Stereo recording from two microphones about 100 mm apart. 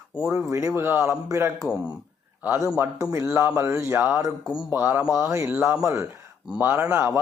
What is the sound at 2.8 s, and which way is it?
Speech, 25° right (ahead or behind).